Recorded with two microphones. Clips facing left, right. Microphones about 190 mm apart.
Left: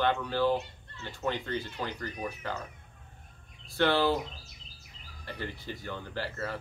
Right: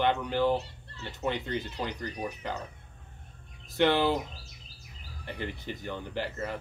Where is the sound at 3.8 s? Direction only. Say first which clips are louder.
Right 1 dB; 20° right (ahead or behind).